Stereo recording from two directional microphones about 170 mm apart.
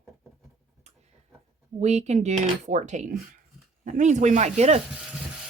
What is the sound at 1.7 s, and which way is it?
Speech, 40° right (ahead or behind).